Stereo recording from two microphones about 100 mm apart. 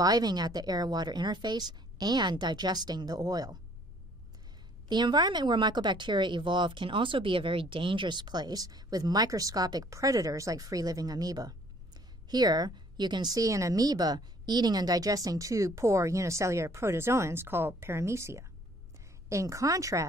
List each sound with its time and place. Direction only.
0.0 s speech: 40° right (ahead or behind)
4.8 s a woman's voice: 50° right (ahead or behind)